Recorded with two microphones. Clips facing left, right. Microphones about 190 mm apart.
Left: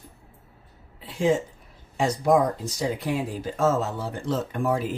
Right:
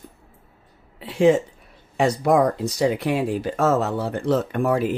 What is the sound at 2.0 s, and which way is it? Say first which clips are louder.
Speech: right 3 dB; 70° right (ahead or behind).